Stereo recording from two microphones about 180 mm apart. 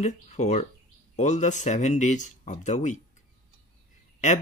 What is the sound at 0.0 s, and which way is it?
Speech, 40° left (ahead or behind).